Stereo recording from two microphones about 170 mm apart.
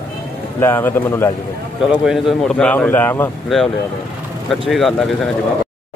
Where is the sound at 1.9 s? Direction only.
Centre (ahead or behind).